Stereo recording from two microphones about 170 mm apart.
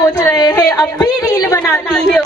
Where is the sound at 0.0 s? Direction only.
20° left (ahead or behind).